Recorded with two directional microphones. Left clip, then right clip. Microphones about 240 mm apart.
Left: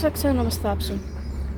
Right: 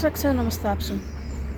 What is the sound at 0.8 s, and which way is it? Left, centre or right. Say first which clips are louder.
Speech: left 1 dB; left.